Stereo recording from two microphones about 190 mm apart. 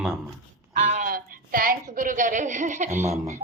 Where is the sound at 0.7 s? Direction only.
40° right (ahead or behind).